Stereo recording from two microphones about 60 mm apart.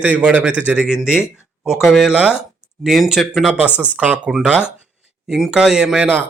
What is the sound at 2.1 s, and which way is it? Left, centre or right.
Speech, right.